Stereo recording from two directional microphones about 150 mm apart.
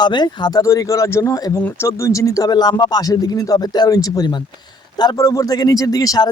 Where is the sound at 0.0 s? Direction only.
30° left (ahead or behind).